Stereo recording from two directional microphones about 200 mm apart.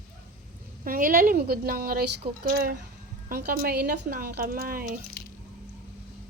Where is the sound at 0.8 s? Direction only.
45° right (ahead or behind).